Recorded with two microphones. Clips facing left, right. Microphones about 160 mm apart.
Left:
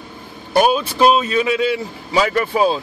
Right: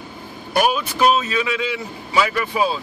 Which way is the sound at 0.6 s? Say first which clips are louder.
Left 4 dB; 30° left (ahead or behind).